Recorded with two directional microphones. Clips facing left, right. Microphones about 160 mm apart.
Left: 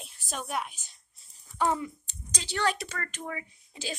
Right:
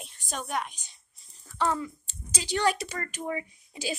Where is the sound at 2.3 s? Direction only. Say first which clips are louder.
Right 3 dB; 10° right (ahead or behind).